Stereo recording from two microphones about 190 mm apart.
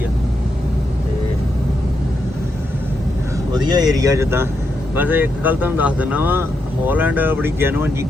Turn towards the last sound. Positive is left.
turn(degrees=-10)  # may be behind; listen again after turning